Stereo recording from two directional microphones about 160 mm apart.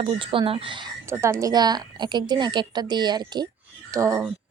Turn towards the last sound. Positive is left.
turn(degrees=-20)  # may be behind; listen again after turning